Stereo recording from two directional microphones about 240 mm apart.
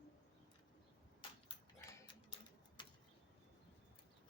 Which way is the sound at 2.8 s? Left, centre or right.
Centre.